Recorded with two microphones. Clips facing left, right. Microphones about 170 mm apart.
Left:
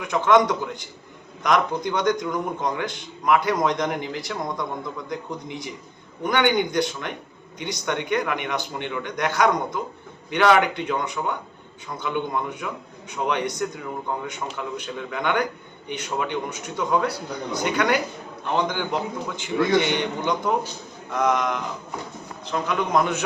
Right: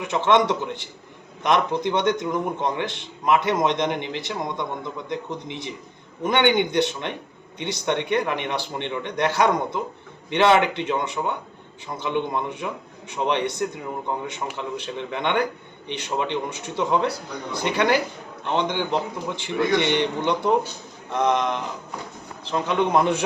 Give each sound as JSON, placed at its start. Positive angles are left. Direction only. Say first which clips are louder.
{"t": 0.0, "sound": "a man's voice", "louder": "left 1 dB", "side_deg": -25}